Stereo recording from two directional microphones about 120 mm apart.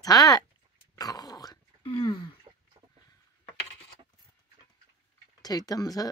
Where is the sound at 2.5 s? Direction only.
35° right (ahead or behind).